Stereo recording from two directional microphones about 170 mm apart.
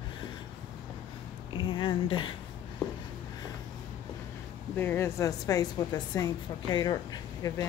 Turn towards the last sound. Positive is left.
turn(degrees=25)  # may be behind; listen again after turning